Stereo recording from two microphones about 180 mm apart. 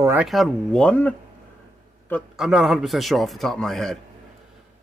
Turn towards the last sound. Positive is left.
turn(degrees=0)  # may be behind; listen again after turning